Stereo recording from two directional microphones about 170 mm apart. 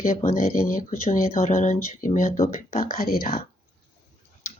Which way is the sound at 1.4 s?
45° left (ahead or behind).